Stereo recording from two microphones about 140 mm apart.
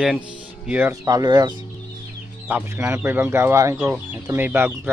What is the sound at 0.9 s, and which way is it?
Speech, 25° right (ahead or behind).